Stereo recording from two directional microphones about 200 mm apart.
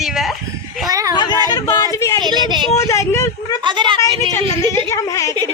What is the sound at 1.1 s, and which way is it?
Speech, 20° left (ahead or behind).